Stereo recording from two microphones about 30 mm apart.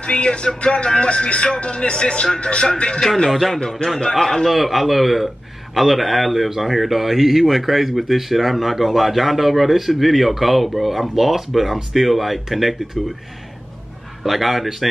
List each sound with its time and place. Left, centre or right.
0.0 s speech: left
3.3 s a man's voice: centre
4.5 s speech: centre
14.2 s speech: centre